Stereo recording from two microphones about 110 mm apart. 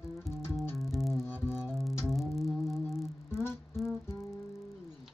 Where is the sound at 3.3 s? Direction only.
20° left (ahead or behind).